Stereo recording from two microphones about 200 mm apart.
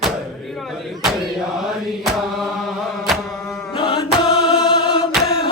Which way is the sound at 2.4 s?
Centre (ahead or behind).